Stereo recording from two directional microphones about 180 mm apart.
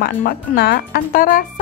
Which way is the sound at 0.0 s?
55° left (ahead or behind).